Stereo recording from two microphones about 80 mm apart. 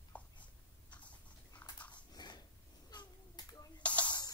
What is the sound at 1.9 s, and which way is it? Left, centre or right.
Dog, left.